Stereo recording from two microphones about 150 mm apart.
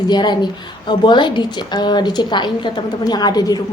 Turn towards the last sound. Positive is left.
turn(degrees=25)  # may be behind; listen again after turning